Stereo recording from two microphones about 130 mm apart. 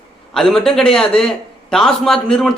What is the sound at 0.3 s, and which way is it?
A man's voice, 5° left (ahead or behind).